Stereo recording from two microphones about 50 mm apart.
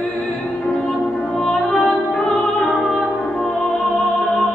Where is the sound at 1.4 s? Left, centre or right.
Left.